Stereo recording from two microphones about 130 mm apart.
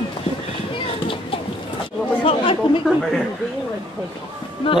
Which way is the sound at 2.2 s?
45° left (ahead or behind).